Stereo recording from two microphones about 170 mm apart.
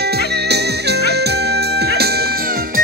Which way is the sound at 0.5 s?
75° right (ahead or behind).